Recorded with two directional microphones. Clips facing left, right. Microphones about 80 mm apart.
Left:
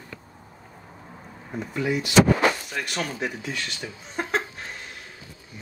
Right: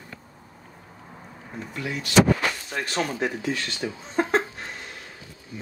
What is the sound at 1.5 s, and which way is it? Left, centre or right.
Speech, centre.